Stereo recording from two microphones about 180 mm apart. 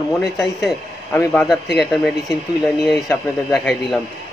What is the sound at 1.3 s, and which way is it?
Speech, 5° left (ahead or behind).